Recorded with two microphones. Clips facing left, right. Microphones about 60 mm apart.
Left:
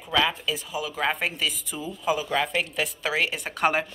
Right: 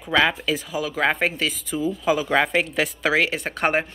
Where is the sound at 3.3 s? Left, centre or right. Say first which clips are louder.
Right 2 dB; right.